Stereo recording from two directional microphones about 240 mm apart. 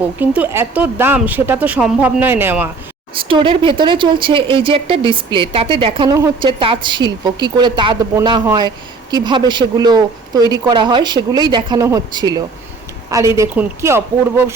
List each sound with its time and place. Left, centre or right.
0.2 s speech: centre
3.2 s speech: right